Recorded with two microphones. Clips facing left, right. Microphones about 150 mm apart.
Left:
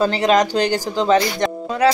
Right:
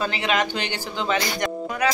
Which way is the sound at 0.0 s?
40° left (ahead or behind).